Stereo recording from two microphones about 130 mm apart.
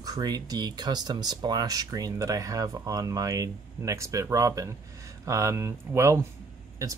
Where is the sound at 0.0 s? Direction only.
30° right (ahead or behind).